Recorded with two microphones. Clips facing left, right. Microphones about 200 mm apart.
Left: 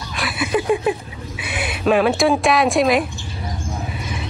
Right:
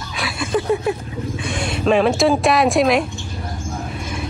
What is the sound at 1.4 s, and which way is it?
Speech, 5° left (ahead or behind).